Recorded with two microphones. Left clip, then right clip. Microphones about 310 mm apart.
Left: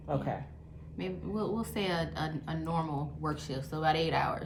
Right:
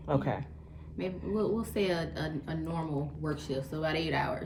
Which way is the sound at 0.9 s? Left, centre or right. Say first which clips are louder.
Right 3 dB; centre.